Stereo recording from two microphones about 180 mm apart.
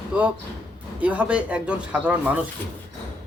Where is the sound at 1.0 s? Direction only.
10° right (ahead or behind).